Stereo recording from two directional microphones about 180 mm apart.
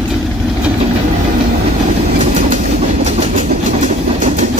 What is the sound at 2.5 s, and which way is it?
Train, 40° right (ahead or behind).